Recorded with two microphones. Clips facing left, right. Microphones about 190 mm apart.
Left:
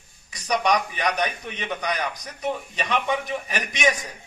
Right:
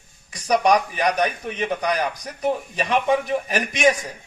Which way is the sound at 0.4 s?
40° right (ahead or behind).